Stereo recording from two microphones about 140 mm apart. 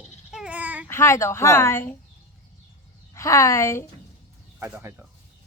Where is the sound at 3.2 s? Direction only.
20° left (ahead or behind).